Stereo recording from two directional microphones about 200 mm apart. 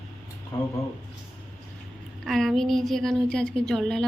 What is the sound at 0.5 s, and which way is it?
Speech, 15° left (ahead or behind).